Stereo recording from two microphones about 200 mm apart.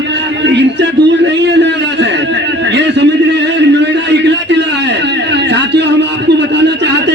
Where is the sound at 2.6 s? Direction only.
60° right (ahead or behind).